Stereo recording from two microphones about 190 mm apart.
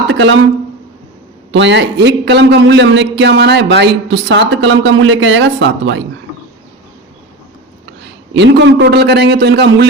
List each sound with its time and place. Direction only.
0.1 s speech: 70° right (ahead or behind)
1.5 s a man's voice: 70° right (ahead or behind)
8.3 s a man's voice: 70° right (ahead or behind)